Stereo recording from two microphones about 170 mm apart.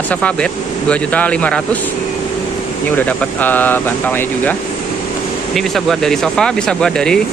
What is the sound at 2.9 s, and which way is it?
Speech, 10° left (ahead or behind).